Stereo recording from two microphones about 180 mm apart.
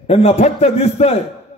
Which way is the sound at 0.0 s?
35° left (ahead or behind).